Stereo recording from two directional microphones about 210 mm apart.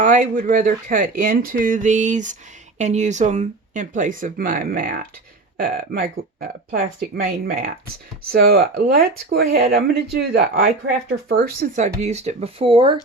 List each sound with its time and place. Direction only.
0.0 s speech: 40° right (ahead or behind)